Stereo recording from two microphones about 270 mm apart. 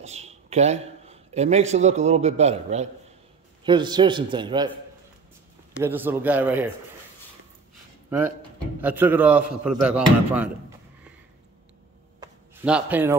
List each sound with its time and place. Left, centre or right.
0.0 s a man's voice: right
5.9 s a man's voice: centre
8.8 s speech: centre
12.2 s a sound: centre